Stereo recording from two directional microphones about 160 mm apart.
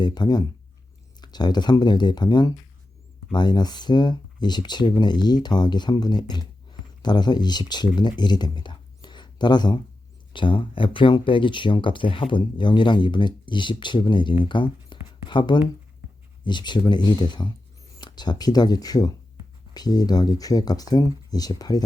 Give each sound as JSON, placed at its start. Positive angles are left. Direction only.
{"t": 0.0, "sound": "speech", "side_deg": 25}